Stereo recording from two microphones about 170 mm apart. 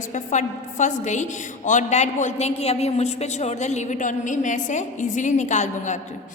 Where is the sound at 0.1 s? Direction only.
45° left (ahead or behind).